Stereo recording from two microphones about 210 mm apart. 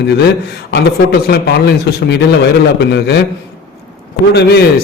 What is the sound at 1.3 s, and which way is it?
A man's voice, 50° left (ahead or behind).